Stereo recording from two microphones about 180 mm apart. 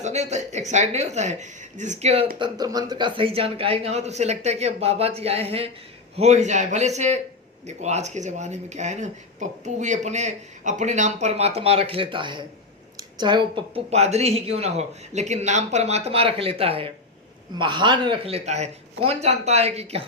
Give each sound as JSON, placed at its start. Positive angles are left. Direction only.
{"t": 0.0, "sound": "speech", "side_deg": -40}
{"t": 2.4, "sound": "speech", "side_deg": -20}